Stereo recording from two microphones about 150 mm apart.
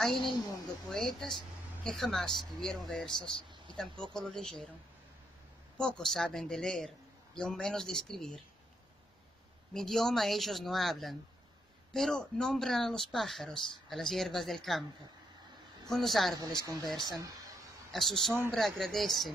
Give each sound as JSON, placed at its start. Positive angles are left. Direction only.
{"t": 0.0, "sound": "speech", "side_deg": 0}
{"t": 3.1, "sound": "speech", "side_deg": 35}
{"t": 4.0, "sound": "speech", "side_deg": 5}
{"t": 5.8, "sound": "speech", "side_deg": 5}
{"t": 9.8, "sound": "speech", "side_deg": 0}
{"t": 15.9, "sound": "speech", "side_deg": 0}
{"t": 17.1, "sound": "a sound", "side_deg": -25}
{"t": 17.9, "sound": "speech", "side_deg": 0}